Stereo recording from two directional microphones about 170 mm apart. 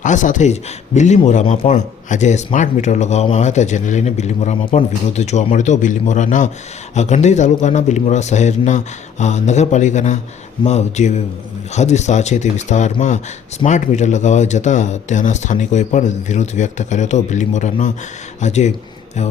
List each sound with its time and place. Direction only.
0.0 s speech: 45° left (ahead or behind)